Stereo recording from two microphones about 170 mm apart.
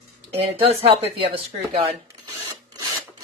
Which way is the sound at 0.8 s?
35° right (ahead or behind).